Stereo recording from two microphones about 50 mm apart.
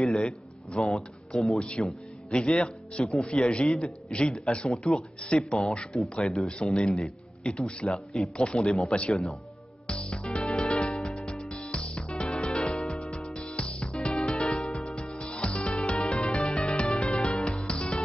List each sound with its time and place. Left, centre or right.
0.1 s speech: centre
1.6 s a man's voice: centre
3.1 s a man's voice: centre
6.0 s a man's voice: centre
7.8 s a man's voice: centre
9.8 s music: centre
12.7 s music: left